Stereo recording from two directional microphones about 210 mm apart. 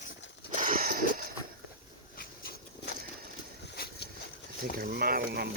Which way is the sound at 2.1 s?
45° left (ahead or behind).